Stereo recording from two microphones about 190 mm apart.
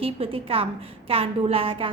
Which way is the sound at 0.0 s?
30° right (ahead or behind).